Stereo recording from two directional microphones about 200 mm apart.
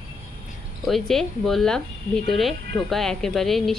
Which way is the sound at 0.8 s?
Centre (ahead or behind).